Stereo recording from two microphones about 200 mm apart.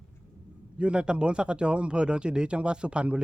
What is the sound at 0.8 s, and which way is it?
Speech, 5° right (ahead or behind).